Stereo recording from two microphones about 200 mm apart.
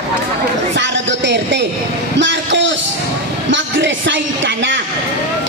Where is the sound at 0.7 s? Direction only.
60° right (ahead or behind).